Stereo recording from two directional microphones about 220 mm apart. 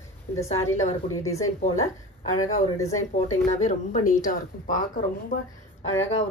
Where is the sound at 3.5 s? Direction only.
30° left (ahead or behind).